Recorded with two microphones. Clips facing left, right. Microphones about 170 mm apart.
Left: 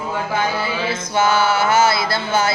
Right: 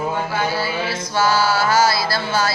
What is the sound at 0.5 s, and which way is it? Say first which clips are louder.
Chant: even; 20° left (ahead or behind).